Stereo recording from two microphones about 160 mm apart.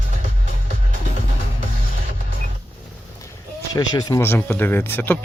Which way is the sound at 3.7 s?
25° left (ahead or behind).